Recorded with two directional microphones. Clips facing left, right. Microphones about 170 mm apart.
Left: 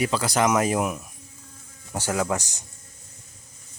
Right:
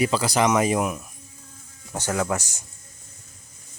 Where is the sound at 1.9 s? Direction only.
15° left (ahead or behind).